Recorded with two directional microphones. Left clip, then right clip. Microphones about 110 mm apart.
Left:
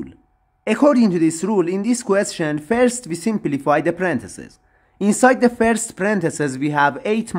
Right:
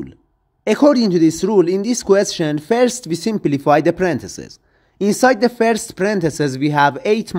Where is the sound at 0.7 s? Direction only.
25° right (ahead or behind).